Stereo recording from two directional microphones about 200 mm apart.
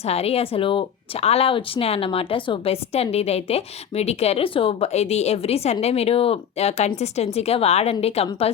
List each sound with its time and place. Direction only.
0.0 s speech: 30° left (ahead or behind)